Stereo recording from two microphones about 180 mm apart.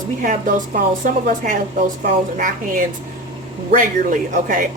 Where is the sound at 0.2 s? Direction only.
45° right (ahead or behind).